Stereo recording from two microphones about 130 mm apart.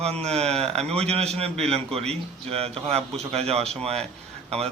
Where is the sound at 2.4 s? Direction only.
50° right (ahead or behind).